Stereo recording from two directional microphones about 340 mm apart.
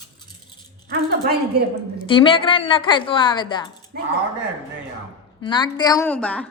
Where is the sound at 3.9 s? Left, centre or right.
Right.